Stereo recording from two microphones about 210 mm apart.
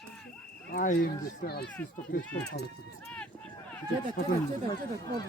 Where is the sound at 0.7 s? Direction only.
40° left (ahead or behind).